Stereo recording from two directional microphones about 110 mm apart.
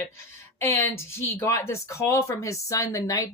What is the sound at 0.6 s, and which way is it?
A woman's voice, 25° left (ahead or behind).